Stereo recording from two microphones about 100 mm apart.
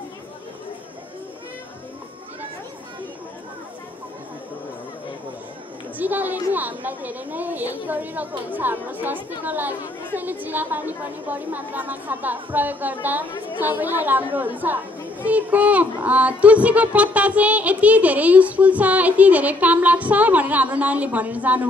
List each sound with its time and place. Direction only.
5.9 s a woman's voice: 15° right (ahead or behind)